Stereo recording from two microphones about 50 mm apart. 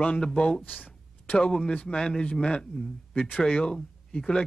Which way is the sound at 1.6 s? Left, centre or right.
Left.